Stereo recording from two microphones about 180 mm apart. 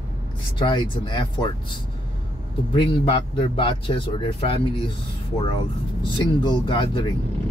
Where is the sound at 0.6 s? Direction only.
25° left (ahead or behind).